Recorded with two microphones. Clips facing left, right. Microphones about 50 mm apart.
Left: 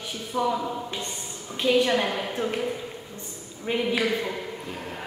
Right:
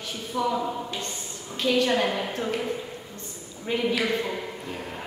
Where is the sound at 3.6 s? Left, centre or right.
Centre.